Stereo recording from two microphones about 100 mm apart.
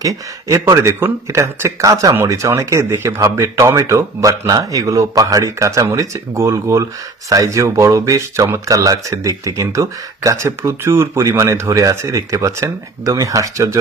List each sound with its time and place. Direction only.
0.8 s speech: 25° right (ahead or behind)